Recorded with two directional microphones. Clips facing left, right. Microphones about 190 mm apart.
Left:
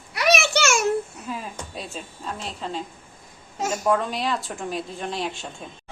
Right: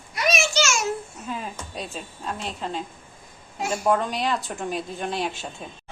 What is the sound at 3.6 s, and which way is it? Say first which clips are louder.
Speech: left 1 dB; 40° left (ahead or behind).